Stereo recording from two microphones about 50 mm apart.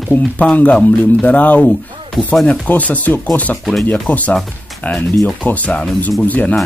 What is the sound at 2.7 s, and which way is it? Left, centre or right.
Speech, left.